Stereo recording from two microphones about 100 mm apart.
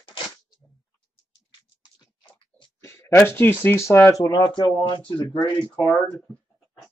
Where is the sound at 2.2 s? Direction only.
50° left (ahead or behind).